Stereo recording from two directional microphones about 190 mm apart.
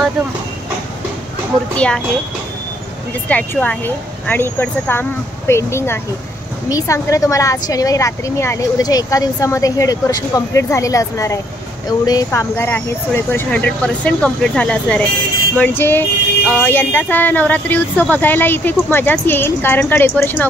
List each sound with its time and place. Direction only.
1.8 s speech: 5° left (ahead or behind)
3.3 s speech: 5° left (ahead or behind)